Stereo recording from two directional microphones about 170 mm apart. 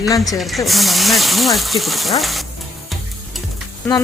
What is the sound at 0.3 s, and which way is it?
Speech, centre (ahead or behind).